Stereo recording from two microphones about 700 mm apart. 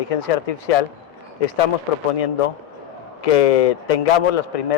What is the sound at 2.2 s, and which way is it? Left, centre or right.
A man's voice, left.